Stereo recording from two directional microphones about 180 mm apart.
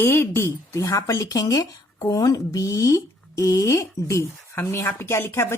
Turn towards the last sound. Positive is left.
turn(degrees=15)  # may be behind; listen again after turning